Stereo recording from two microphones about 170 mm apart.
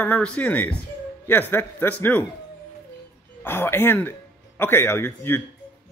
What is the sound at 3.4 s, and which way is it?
Speech, 15° left (ahead or behind).